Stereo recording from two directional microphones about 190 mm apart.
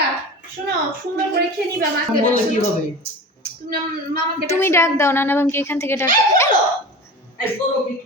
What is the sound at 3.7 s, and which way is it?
Speech, 50° right (ahead or behind).